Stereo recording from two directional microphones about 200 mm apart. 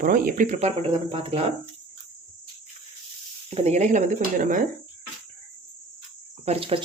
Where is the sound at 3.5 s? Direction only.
35° right (ahead or behind).